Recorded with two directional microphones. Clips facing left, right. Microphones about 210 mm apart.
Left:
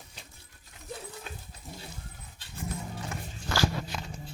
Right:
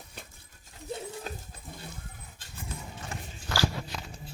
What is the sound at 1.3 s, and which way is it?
Dog, 40° right (ahead or behind).